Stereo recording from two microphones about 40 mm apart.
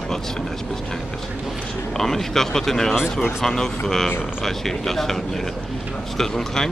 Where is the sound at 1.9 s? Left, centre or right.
Centre.